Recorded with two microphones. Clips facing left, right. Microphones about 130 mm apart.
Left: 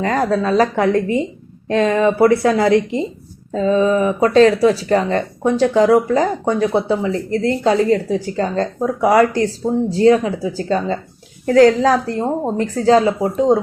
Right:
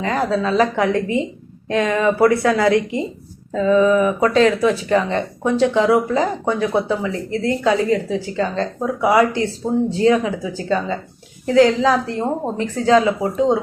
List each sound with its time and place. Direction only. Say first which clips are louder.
0.0 s a woman's voice: left 2 dB; 45° left (ahead or behind)